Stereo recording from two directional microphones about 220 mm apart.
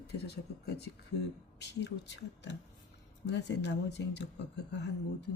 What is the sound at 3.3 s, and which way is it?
Speech, 50° left (ahead or behind).